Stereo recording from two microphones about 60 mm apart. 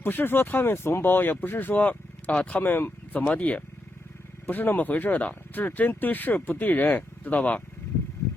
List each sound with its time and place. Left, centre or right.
0.0 s speech: left
2.3 s speech: centre
2.6 s speech: left
3.1 s speech: left
4.4 s speech: left